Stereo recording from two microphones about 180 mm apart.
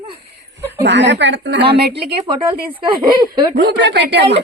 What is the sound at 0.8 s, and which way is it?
Speech, 75° right (ahead or behind).